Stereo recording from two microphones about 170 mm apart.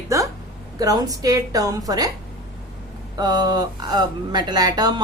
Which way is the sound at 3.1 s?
25° right (ahead or behind).